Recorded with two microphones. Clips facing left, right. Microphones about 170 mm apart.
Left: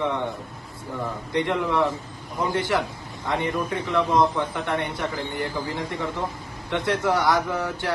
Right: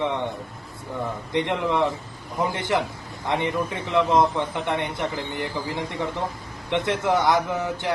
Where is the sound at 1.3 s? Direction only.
20° right (ahead or behind).